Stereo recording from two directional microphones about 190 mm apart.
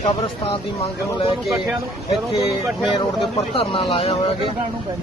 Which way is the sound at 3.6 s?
30° left (ahead or behind).